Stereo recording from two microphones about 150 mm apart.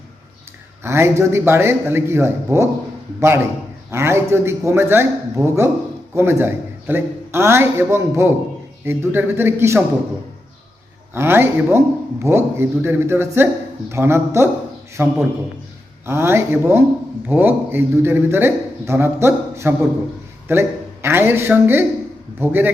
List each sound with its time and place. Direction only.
0.8 s a man's voice: 15° right (ahead or behind)
11.1 s a man's voice: 15° right (ahead or behind)